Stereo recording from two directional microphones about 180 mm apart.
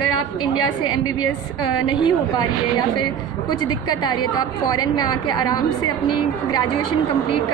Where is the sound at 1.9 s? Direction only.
25° left (ahead or behind).